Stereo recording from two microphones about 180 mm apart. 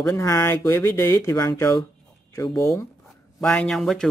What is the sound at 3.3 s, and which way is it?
Speech, 5° left (ahead or behind).